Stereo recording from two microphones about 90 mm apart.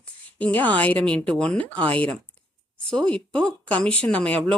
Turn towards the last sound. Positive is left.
turn(degrees=10)  # may be behind; listen again after turning